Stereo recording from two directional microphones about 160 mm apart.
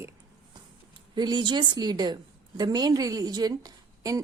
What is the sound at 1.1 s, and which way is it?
A woman's voice, 30° right (ahead or behind).